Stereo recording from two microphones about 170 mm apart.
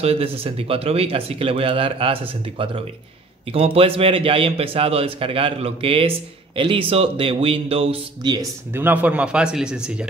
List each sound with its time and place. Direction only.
0.0 s a man's voice: 35° right (ahead or behind)
8.7 s a man's voice: 10° right (ahead or behind)